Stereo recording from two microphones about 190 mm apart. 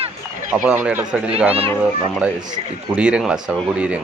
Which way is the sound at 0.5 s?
10° right (ahead or behind).